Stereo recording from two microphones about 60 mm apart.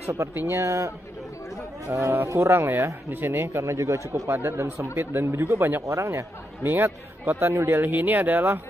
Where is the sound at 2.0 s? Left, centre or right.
Right.